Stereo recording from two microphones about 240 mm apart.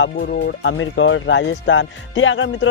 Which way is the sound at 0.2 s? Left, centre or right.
Left.